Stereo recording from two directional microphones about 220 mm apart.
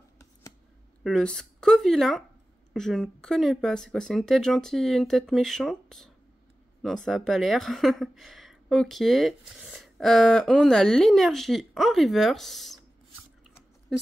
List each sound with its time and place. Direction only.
1.0 s speech: 5° left (ahead or behind)